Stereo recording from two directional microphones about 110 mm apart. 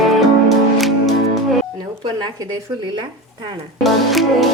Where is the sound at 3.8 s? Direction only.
Centre (ahead or behind).